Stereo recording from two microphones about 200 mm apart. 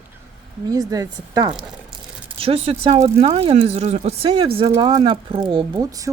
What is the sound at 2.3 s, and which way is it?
Speech, 30° right (ahead or behind).